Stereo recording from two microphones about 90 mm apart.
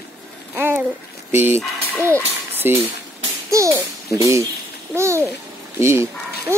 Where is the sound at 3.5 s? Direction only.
35° right (ahead or behind).